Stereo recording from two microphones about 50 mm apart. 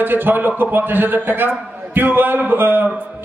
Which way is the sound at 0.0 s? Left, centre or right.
Right.